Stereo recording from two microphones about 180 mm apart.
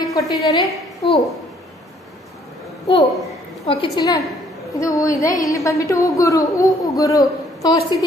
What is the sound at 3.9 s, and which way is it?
A woman's voice, 20° left (ahead or behind).